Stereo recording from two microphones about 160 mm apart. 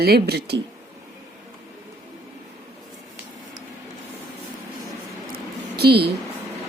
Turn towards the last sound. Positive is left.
turn(degrees=-90)